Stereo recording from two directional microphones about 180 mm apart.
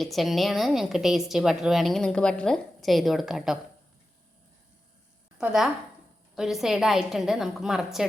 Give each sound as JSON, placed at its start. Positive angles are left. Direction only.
{"t": 0.0, "sound": "a woman's voice", "side_deg": 0}
{"t": 5.4, "sound": "a woman's voice", "side_deg": -5}